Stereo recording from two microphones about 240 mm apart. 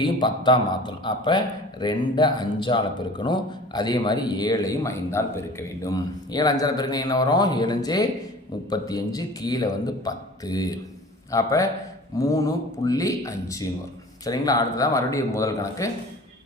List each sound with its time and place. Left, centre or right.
0.0 s a man's voice: centre